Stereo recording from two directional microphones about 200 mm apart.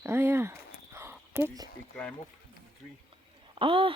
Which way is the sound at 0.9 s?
10° right (ahead or behind).